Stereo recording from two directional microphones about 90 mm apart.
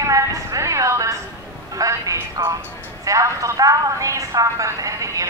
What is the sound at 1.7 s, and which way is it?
A woman's voice, 40° right (ahead or behind).